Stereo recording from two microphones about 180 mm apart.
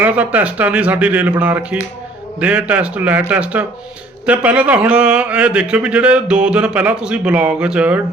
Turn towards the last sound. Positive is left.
turn(degrees=-5)  # may be behind; listen again after turning